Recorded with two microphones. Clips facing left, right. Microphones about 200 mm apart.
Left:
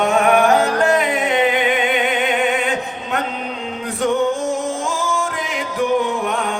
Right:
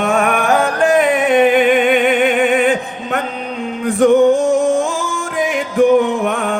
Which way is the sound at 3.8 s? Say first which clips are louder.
Right 9 dB; 50° right (ahead or behind).